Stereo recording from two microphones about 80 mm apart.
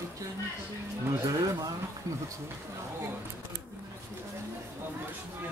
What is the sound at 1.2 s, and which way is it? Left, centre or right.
Speech, right.